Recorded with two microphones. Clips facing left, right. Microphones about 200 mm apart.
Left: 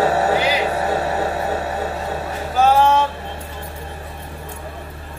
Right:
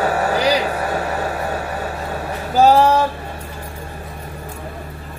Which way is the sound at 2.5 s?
35° right (ahead or behind).